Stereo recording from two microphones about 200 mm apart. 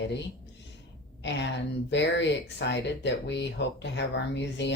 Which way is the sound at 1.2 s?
60° left (ahead or behind).